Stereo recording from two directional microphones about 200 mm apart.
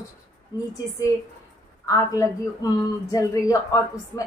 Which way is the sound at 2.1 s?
15° left (ahead or behind).